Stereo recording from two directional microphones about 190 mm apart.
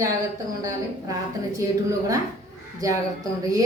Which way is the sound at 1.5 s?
15° right (ahead or behind).